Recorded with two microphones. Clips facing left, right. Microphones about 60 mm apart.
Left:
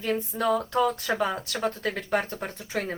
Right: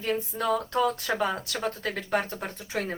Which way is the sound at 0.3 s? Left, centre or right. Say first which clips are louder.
Left 2 dB; centre.